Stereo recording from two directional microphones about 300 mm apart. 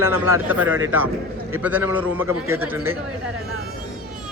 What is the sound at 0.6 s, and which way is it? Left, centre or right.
Speech, right.